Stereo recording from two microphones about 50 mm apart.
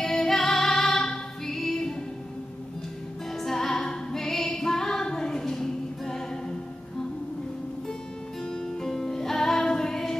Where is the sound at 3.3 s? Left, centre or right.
Centre.